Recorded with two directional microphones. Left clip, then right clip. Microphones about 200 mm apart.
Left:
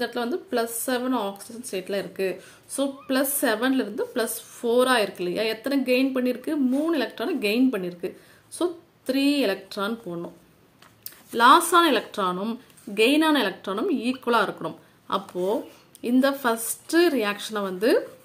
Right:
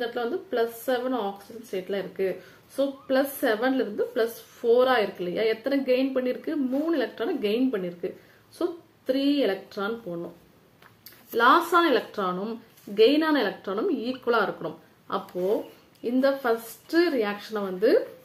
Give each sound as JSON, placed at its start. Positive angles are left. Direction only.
{"t": 0.0, "sound": "speech", "side_deg": 40}
{"t": 11.3, "sound": "speech", "side_deg": 35}